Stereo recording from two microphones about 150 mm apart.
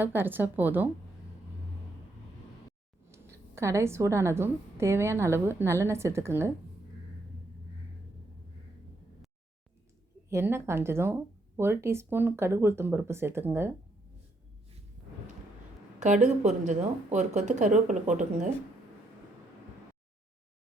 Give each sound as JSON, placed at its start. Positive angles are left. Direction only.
{"t": 0.0, "sound": "speech", "side_deg": -15}
{"t": 3.1, "sound": "speech", "side_deg": -20}
{"t": 10.2, "sound": "speech", "side_deg": -15}
{"t": 16.0, "sound": "a woman's voice", "side_deg": -55}